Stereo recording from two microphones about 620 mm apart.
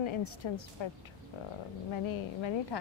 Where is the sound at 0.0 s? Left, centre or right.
Left.